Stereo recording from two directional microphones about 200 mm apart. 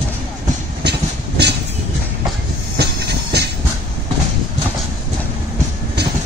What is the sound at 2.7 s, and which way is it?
Train, 55° right (ahead or behind).